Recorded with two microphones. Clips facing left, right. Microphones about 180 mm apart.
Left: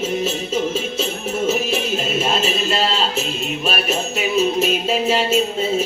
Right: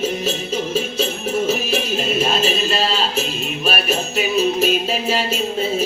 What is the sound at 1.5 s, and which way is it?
Music, 25° left (ahead or behind).